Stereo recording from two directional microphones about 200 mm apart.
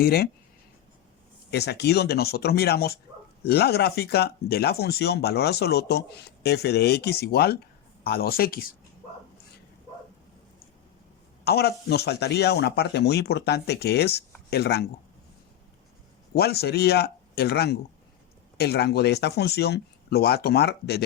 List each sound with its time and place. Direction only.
0.0 s speech: 50° left (ahead or behind)
1.5 s speech: 55° left (ahead or behind)
11.4 s speech: 55° left (ahead or behind)
16.3 s speech: 50° left (ahead or behind)